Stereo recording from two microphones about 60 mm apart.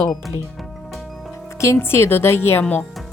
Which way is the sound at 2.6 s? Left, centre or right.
Left.